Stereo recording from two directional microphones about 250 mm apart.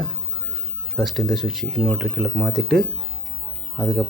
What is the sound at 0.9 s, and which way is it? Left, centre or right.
Speech, centre.